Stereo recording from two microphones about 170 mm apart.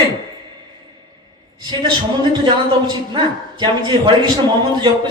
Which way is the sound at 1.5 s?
25° right (ahead or behind).